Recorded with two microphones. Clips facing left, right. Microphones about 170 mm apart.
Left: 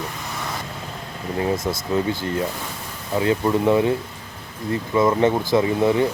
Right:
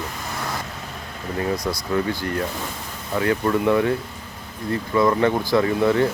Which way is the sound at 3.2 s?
20° left (ahead or behind).